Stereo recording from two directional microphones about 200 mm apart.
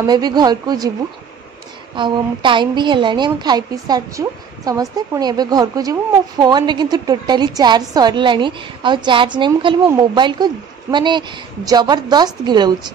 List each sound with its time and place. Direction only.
0.0 s a woman's voice: 20° right (ahead or behind)
2.0 s a woman's voice: 25° right (ahead or behind)